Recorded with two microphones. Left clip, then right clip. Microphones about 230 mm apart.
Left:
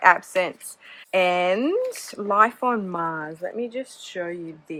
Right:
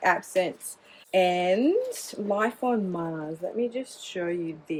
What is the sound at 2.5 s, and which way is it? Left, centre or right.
Speech, left.